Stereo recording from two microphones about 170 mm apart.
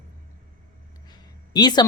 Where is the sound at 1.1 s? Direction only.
25° left (ahead or behind).